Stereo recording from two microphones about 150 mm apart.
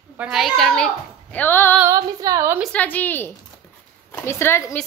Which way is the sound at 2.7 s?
10° left (ahead or behind).